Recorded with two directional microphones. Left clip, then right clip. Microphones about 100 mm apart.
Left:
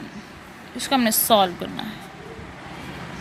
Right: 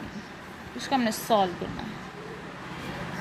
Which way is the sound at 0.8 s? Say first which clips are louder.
Left 6 dB; 65° left (ahead or behind).